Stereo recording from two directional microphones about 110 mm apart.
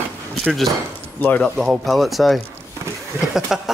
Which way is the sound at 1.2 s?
15° left (ahead or behind).